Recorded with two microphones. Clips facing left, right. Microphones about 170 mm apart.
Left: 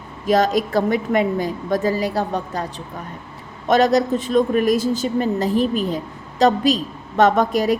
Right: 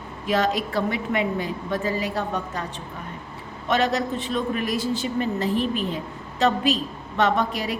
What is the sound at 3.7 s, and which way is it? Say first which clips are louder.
A man's voice: left 7 dB; 40° left (ahead or behind).